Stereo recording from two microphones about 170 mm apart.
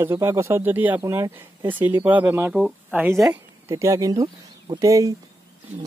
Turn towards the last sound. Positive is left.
turn(degrees=-20)  # may be behind; listen again after turning